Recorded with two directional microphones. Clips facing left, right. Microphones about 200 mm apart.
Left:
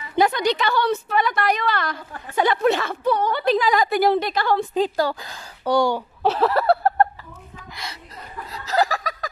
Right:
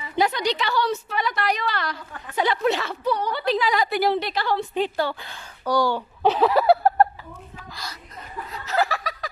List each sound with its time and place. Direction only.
0.2 s a woman's voice: 50° left (ahead or behind)
5.7 s speech: 25° left (ahead or behind)
5.9 s speech: centre (ahead or behind)
7.7 s chuckle: 25° left (ahead or behind)
8.5 s laughter: 35° left (ahead or behind)